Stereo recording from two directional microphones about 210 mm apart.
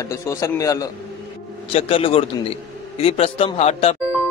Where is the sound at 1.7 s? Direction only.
25° left (ahead or behind).